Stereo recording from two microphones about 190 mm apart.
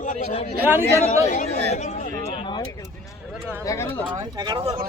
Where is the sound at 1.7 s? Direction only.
40° left (ahead or behind).